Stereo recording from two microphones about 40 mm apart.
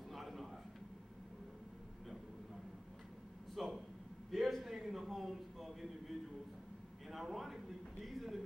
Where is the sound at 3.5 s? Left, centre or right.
Centre.